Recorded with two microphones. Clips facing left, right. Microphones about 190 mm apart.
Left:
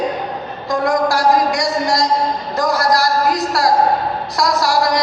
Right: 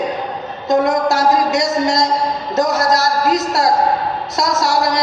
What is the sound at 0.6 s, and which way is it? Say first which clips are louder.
A man's voice: right 2 dB; 20° right (ahead or behind).